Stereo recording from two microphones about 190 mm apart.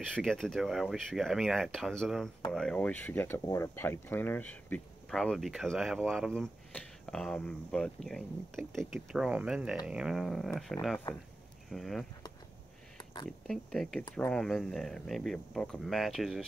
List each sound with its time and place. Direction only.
0.0 s speech: 5° left (ahead or behind)
12.9 s a sound: 25° left (ahead or behind)
13.5 s speech: centre (ahead or behind)